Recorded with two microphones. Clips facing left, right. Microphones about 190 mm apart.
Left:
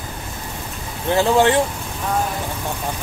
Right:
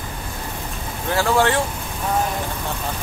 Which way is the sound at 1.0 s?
20° left (ahead or behind).